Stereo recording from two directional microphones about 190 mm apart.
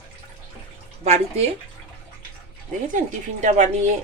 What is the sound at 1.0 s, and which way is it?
Speech, 35° right (ahead or behind).